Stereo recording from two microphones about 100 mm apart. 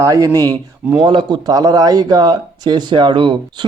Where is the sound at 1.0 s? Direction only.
50° right (ahead or behind).